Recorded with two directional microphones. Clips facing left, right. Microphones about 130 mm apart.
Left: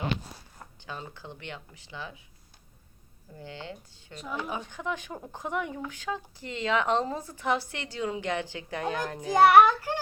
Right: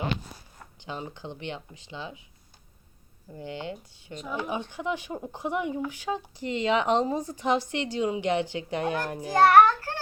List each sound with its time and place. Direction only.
0.8 s speech: 20° right (ahead or behind)
3.3 s speech: 20° right (ahead or behind)
9.3 s a child's voice: 15° left (ahead or behind)